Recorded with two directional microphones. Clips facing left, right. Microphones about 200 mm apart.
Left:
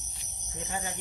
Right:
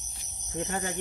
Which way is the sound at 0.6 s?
55° right (ahead or behind).